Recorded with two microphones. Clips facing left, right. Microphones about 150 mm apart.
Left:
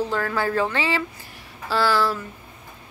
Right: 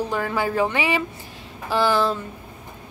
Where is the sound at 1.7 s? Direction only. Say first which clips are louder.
Right 1 dB; 20° right (ahead or behind).